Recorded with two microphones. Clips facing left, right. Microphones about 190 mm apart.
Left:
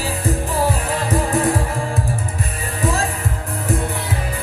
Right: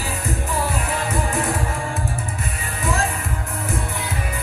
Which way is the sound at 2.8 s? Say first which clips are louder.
Left 3 dB; 35° left (ahead or behind).